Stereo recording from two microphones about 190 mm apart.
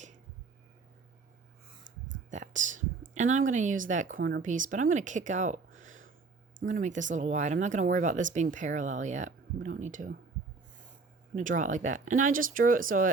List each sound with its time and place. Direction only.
2.3 s speech: 40° right (ahead or behind)
4.2 s speech: 60° right (ahead or behind)
4.4 s speech: 45° right (ahead or behind)
11.3 s speech: 40° right (ahead or behind)